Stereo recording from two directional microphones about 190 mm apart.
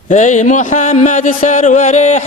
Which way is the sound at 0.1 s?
40° left (ahead or behind).